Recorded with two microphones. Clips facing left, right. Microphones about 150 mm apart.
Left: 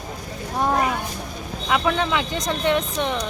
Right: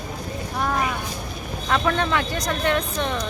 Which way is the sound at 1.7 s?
10° left (ahead or behind).